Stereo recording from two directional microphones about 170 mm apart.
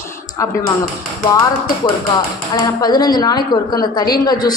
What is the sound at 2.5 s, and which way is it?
A woman's voice, 25° left (ahead or behind).